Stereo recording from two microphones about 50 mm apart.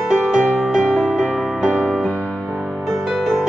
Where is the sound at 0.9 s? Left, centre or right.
Centre.